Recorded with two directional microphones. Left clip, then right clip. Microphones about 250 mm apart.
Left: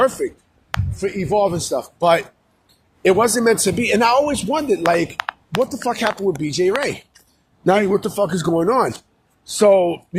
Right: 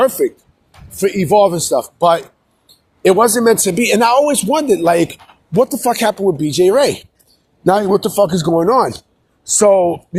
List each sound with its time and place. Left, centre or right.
0.0 s speech: right
0.9 s speech: right
7.7 s speech: centre
7.9 s speech: centre